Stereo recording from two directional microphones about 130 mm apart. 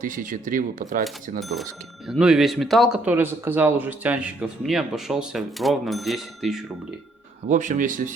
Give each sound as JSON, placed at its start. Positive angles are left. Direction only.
{"t": 0.0, "sound": "speech", "side_deg": -90}
{"t": 1.4, "sound": "speech", "side_deg": 0}
{"t": 7.4, "sound": "speech", "side_deg": -75}